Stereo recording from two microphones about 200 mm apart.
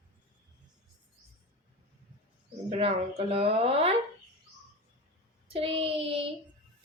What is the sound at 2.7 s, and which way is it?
A woman's voice, 30° right (ahead or behind).